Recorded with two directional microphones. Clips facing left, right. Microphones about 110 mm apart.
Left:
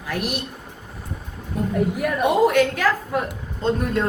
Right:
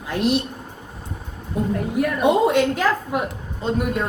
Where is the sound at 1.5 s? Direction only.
25° right (ahead or behind).